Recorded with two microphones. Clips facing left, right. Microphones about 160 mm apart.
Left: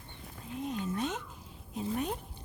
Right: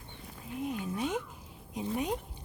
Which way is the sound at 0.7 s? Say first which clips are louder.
Right 1 dB; 10° right (ahead or behind).